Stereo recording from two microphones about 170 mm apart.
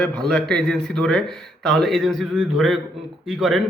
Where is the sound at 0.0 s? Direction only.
5° left (ahead or behind).